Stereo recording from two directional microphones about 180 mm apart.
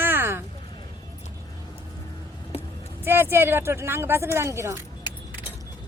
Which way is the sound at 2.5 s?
35° left (ahead or behind).